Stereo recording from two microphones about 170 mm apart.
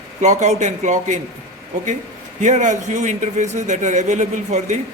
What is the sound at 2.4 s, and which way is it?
Speech, 45° right (ahead or behind).